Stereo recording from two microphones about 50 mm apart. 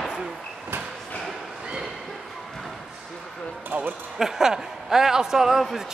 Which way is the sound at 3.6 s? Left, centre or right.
Right.